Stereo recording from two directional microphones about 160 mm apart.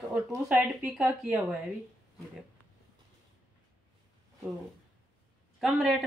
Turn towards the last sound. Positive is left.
turn(degrees=0)  # may be behind; listen again after turning